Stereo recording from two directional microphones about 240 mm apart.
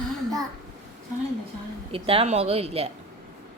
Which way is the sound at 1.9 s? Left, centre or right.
Right.